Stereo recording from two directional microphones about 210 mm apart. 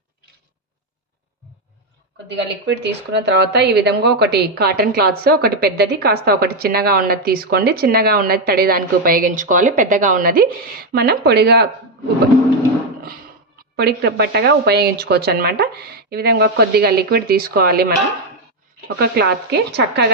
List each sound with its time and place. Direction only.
2.2 s a woman's voice: 55° right (ahead or behind)
13.7 s a woman's voice: 50° right (ahead or behind)
18.9 s a woman's voice: 50° right (ahead or behind)